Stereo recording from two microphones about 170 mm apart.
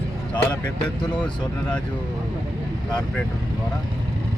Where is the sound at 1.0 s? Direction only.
25° left (ahead or behind).